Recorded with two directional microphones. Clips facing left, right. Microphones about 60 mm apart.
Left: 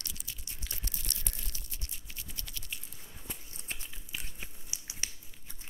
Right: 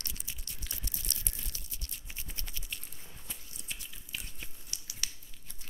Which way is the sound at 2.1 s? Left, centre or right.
Right.